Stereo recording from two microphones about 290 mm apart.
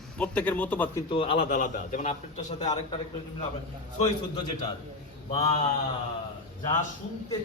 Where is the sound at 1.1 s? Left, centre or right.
Centre.